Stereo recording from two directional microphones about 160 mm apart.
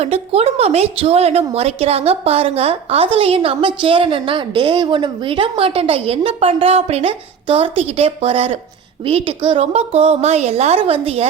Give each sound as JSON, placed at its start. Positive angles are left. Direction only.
{"t": 0.0, "sound": "a woman's voice", "side_deg": -40}